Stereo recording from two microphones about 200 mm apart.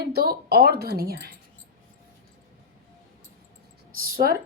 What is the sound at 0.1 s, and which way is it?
Speech, 50° right (ahead or behind).